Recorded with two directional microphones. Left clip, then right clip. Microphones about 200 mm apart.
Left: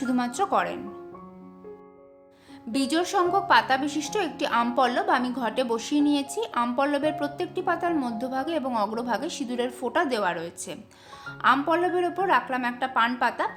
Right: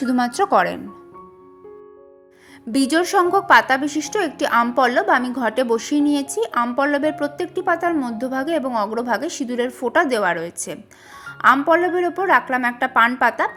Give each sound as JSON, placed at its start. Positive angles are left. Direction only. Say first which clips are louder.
{"t": 0.3, "sound": "a woman's voice", "louder": "right 8 dB", "side_deg": -20}
{"t": 2.7, "sound": "a woman's voice", "louder": "right 7 dB", "side_deg": -25}